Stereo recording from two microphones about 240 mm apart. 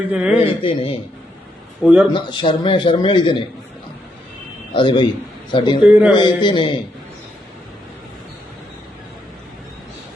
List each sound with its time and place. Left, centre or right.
0.1 s speech: centre
0.4 s a man's voice: left
1.8 s speech: centre
2.1 s a man's voice: centre
4.7 s a man's voice: centre
5.8 s speech: centre
6.1 s a man's voice: centre